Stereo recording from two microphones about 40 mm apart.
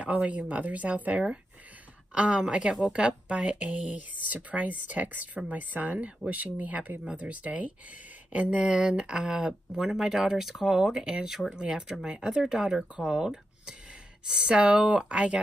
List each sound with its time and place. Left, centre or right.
0.0 s speech: right
2.1 s speech: right